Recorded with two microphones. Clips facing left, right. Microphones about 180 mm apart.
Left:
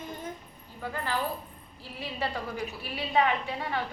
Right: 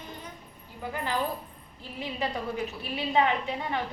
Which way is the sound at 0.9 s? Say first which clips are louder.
Right 1 dB; 15° right (ahead or behind).